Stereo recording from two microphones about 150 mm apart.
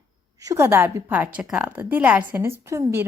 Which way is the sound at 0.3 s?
20° right (ahead or behind).